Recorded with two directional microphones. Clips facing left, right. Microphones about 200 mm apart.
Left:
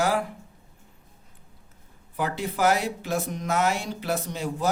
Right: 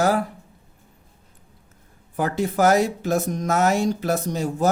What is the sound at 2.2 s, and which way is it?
Speech, 45° right (ahead or behind).